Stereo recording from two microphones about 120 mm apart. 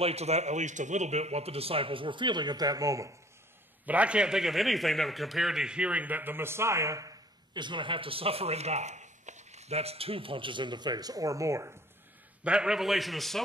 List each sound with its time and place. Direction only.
0.0 s speech: 60° right (ahead or behind); by 3.1 s 30° right (ahead or behind)
3.8 s a man's voice: 10° right (ahead or behind)
12.4 s a man's voice: 5° right (ahead or behind)